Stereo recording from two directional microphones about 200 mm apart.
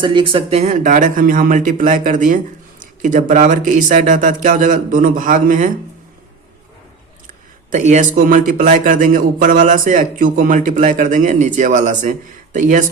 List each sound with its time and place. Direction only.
0.0 s speech: 25° right (ahead or behind); by 5.7 s 40° right (ahead or behind)
7.3 s speech: 40° right (ahead or behind)